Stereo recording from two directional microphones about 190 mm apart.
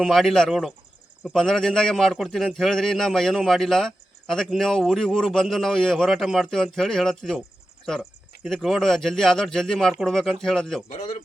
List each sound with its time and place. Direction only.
0.0 s a man's voice: centre (ahead or behind)
8.4 s a man's voice: centre (ahead or behind)
10.8 s a man's voice: 40° left (ahead or behind)